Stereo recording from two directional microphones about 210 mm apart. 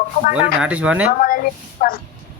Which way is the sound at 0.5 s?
5° right (ahead or behind).